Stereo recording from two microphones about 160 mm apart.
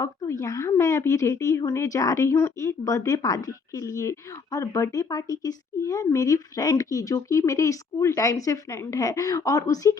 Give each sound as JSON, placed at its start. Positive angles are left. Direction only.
{"t": 0.0, "sound": "speech", "side_deg": 20}